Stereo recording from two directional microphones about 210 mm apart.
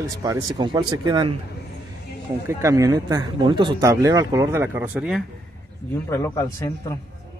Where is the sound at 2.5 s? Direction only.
15° right (ahead or behind).